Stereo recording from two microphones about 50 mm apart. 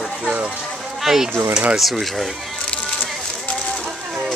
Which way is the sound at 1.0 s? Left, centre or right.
Centre.